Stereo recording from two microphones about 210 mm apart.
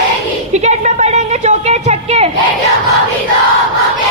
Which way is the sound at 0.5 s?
35° right (ahead or behind).